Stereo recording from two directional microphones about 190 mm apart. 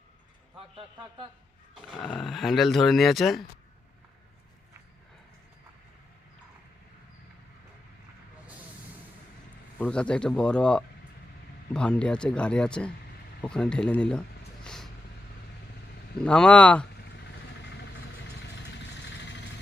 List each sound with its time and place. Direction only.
2.0 s speech: centre (ahead or behind)
9.7 s speech: 5° left (ahead or behind)
16.2 s speech: 5° left (ahead or behind)
18.8 s vehicle: 65° left (ahead or behind)